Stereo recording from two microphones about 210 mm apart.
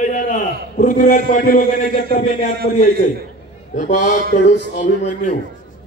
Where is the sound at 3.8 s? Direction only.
35° left (ahead or behind).